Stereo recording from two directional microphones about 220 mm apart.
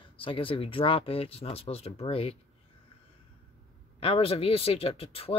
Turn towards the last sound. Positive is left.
turn(degrees=25)  # may be behind; listen again after turning